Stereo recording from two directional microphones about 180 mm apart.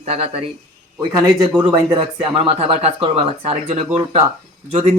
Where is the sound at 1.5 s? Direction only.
20° right (ahead or behind); by 4.9 s 35° right (ahead or behind).